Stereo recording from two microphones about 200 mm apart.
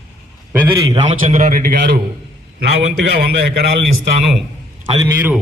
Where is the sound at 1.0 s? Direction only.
40° right (ahead or behind).